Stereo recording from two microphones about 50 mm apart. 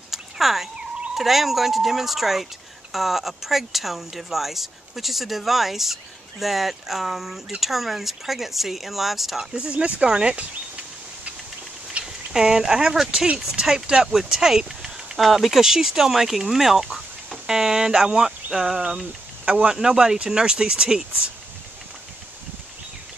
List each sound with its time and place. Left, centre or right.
0.1 s fowl: centre
1.1 s speech: centre
9.5 s speech: right
10.3 s a sound: right
12.0 s speech: centre